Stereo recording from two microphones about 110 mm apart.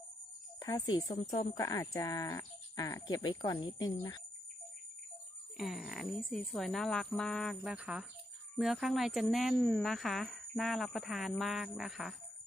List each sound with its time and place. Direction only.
0.6 s speech: 35° left (ahead or behind)
1.5 s speech: 35° left (ahead or behind)
5.5 s speech: centre (ahead or behind)